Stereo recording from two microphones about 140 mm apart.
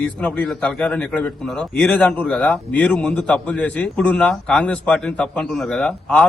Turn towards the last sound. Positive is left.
turn(degrees=5)  # may be behind; listen again after turning